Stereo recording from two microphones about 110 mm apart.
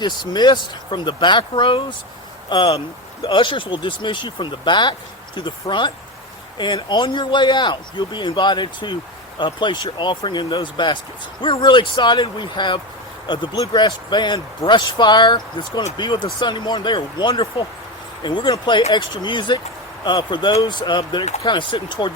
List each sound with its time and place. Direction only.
0.3 s speech: 45° left (ahead or behind)